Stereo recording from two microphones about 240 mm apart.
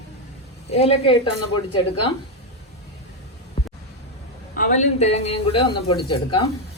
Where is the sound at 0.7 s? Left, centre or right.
Left.